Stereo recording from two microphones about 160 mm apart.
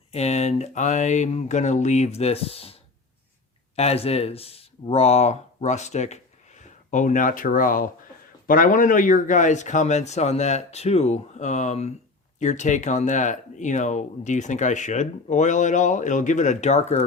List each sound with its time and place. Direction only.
0.1 s speech: 45° left (ahead or behind)
3.8 s speech: 40° left (ahead or behind)